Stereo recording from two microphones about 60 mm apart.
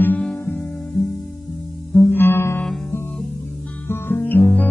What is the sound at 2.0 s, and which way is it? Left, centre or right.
Music, left.